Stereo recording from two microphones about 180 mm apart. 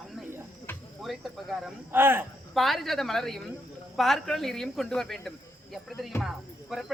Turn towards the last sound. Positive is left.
turn(degrees=0)  # may be behind; listen again after turning